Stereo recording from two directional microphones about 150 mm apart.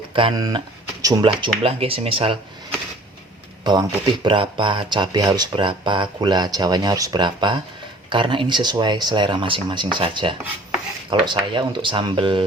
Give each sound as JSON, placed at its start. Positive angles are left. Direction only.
{"t": 0.1, "sound": "speech", "side_deg": -35}
{"t": 1.6, "sound": "speech", "side_deg": -40}
{"t": 3.6, "sound": "speech", "side_deg": -30}